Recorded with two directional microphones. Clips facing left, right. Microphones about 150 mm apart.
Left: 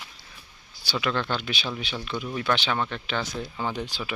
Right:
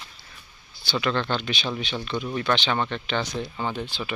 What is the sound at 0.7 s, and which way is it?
Speech, 10° left (ahead or behind).